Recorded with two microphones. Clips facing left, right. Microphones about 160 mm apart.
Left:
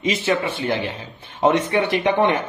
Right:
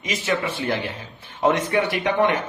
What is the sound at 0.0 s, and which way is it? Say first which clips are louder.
Speech: left 4 dB; 25° left (ahead or behind).